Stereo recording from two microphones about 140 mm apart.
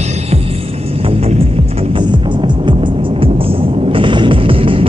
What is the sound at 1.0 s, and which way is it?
Music, 45° right (ahead or behind).